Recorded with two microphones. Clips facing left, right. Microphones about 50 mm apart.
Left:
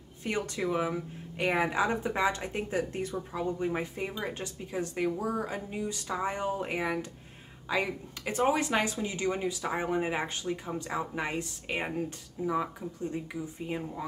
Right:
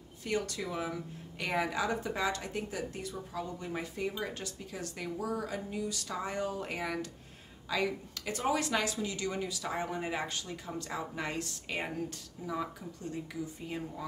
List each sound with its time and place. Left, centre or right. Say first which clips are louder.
0.2 s speech: left 3 dB; left